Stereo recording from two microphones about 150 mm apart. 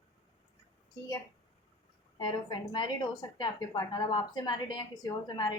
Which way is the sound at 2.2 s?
30° left (ahead or behind).